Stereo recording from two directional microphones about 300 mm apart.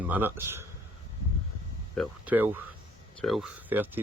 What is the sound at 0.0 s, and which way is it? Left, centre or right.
Speech, centre.